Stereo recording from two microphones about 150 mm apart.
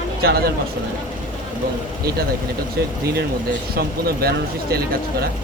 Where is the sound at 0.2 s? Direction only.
90° right.